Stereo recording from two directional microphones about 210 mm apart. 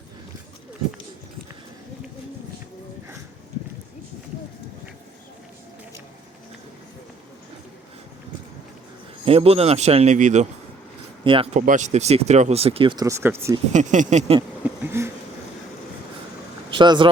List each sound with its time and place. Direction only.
9.2 s speech: 30° right (ahead or behind)
11.2 s speech: 25° right (ahead or behind)
11.6 s speech: 35° right (ahead or behind); by 13.6 s 10° right (ahead or behind)
13.7 s speech: 35° right (ahead or behind)
14.6 s a sound: 10° right (ahead or behind)
16.7 s speech: 20° right (ahead or behind)